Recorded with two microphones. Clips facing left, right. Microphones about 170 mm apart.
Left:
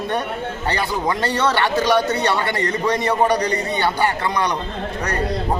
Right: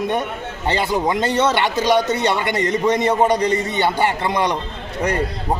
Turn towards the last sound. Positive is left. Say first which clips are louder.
# right 1 dB
turn(degrees=-25)  # may be behind; listen again after turning